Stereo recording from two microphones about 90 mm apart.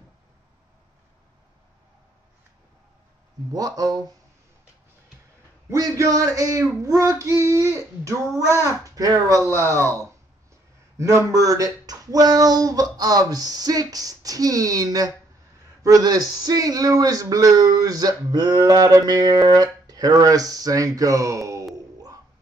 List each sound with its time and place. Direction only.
3.5 s speech: 45° right (ahead or behind)
5.7 s speech: 40° right (ahead or behind)
9.4 s speech: 30° right (ahead or behind)
11.0 s speech: 35° right (ahead or behind)